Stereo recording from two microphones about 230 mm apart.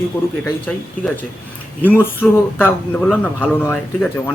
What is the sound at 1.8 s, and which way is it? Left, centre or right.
A man's voice, centre.